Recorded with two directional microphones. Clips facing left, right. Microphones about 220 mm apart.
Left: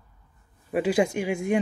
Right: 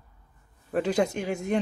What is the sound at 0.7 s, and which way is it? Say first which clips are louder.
Speech: left 2 dB; 10° left (ahead or behind).